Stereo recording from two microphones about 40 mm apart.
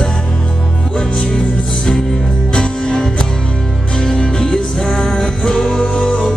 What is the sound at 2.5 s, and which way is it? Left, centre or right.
Music, left.